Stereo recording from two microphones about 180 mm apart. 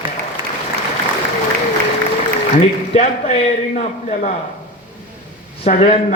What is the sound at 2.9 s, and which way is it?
A man's voice, 35° left (ahead or behind).